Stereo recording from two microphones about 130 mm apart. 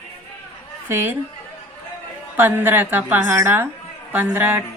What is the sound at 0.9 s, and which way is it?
Speech, 20° right (ahead or behind).